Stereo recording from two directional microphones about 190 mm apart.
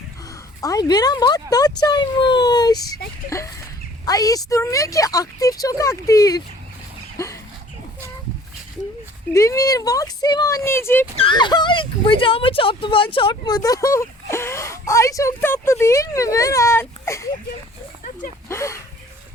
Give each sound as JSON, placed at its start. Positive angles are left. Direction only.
{"t": 0.6, "sound": "speech", "side_deg": 20}
{"t": 9.3, "sound": "speech", "side_deg": 15}
{"t": 11.2, "sound": "speech", "side_deg": 25}
{"t": 18.4, "sound": "speech", "side_deg": 15}